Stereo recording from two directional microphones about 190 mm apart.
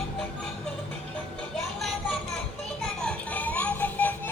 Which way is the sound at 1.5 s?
Centre (ahead or behind).